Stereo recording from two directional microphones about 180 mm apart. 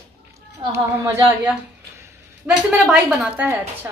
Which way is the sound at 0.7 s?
15° right (ahead or behind).